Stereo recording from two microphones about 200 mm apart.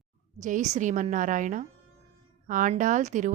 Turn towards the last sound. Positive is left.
turn(degrees=-40)  # may be behind; listen again after turning